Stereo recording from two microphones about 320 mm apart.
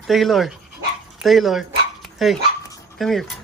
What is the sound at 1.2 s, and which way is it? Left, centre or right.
Dog, centre.